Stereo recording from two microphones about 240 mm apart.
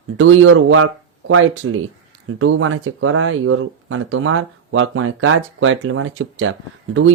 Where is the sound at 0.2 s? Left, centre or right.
Right.